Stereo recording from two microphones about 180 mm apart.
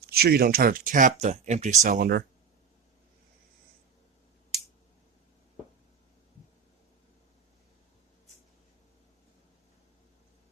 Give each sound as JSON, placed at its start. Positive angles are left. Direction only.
{"t": 0.1, "sound": "speech", "side_deg": -60}